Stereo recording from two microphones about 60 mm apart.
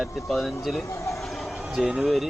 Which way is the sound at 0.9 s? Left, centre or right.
Left.